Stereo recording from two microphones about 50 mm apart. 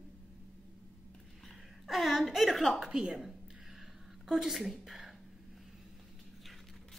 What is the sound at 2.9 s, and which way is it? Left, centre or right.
A woman's voice, centre.